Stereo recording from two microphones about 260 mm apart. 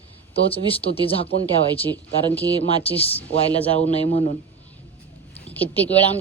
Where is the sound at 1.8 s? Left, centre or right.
Centre.